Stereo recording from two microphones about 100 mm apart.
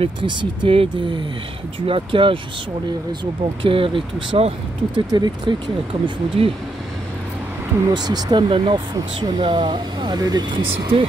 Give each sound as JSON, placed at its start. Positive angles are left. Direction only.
{"t": 0.0, "sound": "speech", "side_deg": -55}
{"t": 3.6, "sound": "speech", "side_deg": -60}
{"t": 4.9, "sound": "speech", "side_deg": -50}
{"t": 6.0, "sound": "speech", "side_deg": -65}
{"t": 7.9, "sound": "speech", "side_deg": -45}